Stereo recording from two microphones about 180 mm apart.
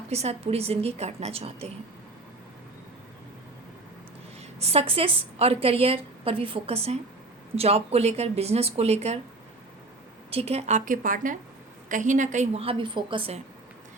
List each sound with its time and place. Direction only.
0.1 s a woman's voice: 35° right (ahead or behind)
4.6 s a woman's voice: 35° right (ahead or behind)
10.3 s a woman's voice: 35° right (ahead or behind)